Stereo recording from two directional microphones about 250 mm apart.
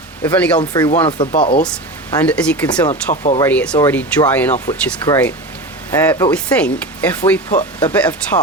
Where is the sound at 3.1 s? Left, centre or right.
Left.